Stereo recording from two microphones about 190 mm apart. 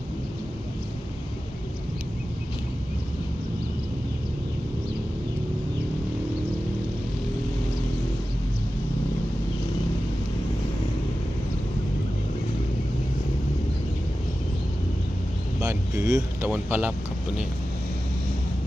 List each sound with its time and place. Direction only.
15.6 s vehicle: 15° right (ahead or behind)
16.5 s speech: 10° right (ahead or behind)